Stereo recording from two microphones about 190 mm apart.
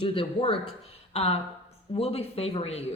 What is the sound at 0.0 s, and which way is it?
A woman's voice, 30° left (ahead or behind).